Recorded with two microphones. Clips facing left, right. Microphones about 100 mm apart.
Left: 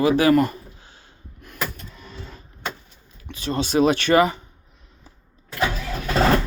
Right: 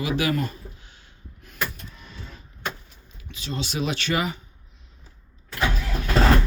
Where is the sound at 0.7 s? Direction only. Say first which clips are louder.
Left 3 dB; 35° left (ahead or behind).